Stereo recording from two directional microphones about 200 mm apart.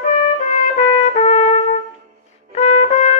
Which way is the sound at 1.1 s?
30° left (ahead or behind).